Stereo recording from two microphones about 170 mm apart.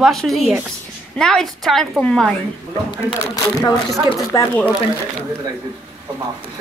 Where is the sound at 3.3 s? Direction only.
20° left (ahead or behind).